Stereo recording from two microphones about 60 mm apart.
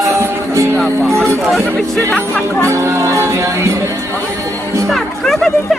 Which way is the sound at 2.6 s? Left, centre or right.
Right.